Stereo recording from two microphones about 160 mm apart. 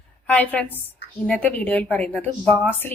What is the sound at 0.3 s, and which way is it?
Speech, 10° left (ahead or behind).